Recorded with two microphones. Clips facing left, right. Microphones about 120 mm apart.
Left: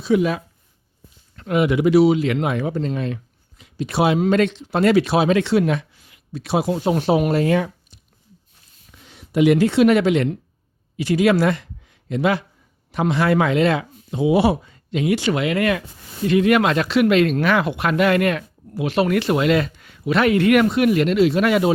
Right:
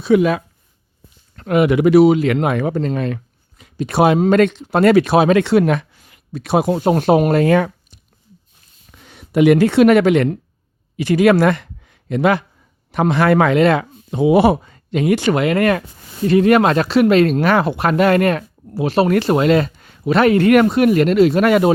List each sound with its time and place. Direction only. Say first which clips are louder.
0.0 s speech: right 4 dB; 65° right (ahead or behind)
1.4 s speech: right 4 dB; 60° right (ahead or behind)